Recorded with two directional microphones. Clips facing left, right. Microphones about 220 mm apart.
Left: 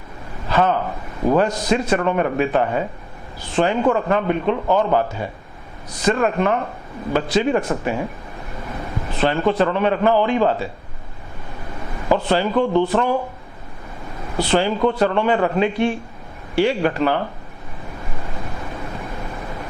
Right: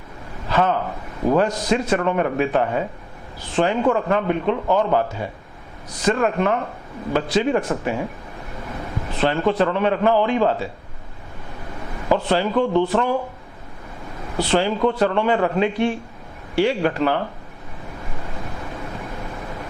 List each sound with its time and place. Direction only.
0.4 s a man's voice: 15° left (ahead or behind)
11.9 s speech: 15° left (ahead or behind)
14.3 s speech: 15° left (ahead or behind)
18.6 s a sound: 25° left (ahead or behind)